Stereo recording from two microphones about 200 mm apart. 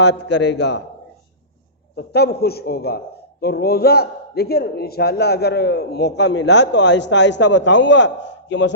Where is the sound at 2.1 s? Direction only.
55° left (ahead or behind).